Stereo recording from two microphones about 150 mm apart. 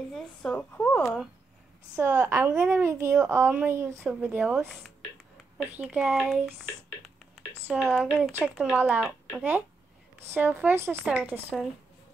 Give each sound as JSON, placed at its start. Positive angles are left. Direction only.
{"t": 0.1, "sound": "a sound", "side_deg": 5}
{"t": 2.0, "sound": "speech", "side_deg": -15}
{"t": 5.6, "sound": "speech", "side_deg": -10}
{"t": 7.7, "sound": "speech", "side_deg": 5}
{"t": 8.7, "sound": "speech", "side_deg": -15}